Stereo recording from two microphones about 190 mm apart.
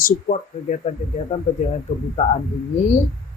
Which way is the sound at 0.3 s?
40° left (ahead or behind).